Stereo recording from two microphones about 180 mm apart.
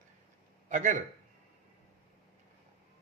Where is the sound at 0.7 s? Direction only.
45° right (ahead or behind).